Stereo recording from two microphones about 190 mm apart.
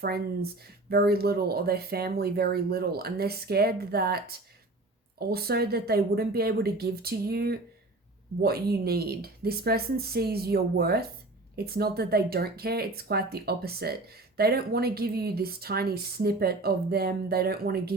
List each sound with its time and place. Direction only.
0.0 s speech: 55° right (ahead or behind)